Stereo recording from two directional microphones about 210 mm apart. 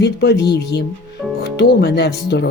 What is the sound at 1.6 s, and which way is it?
Speech, 50° left (ahead or behind).